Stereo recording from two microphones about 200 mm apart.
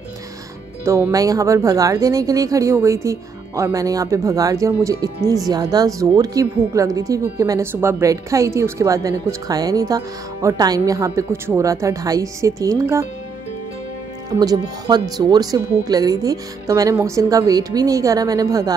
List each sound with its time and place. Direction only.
0.8 s speech: 15° right (ahead or behind)
14.3 s speech: 20° right (ahead or behind)